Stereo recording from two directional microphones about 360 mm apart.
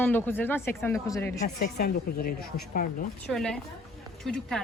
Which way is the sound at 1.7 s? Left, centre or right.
Left.